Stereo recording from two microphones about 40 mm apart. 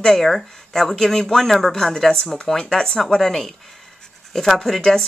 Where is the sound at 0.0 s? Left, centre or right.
Centre.